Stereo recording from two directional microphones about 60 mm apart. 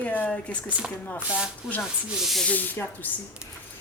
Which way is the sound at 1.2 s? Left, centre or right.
Centre.